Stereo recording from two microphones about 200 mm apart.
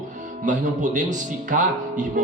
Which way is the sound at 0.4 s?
40° right (ahead or behind).